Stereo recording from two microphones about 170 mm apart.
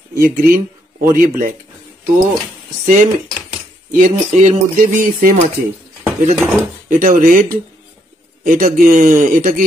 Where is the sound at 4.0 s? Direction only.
45° right (ahead or behind).